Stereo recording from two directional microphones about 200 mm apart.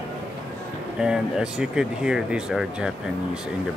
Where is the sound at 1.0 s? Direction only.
5° right (ahead or behind).